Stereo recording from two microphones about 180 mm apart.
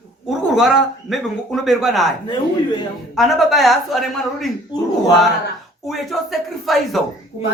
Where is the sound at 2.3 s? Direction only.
25° left (ahead or behind).